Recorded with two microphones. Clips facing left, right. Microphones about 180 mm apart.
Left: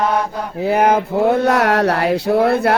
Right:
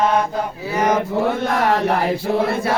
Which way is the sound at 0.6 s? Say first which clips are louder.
Left 5 dB; 60° left (ahead or behind).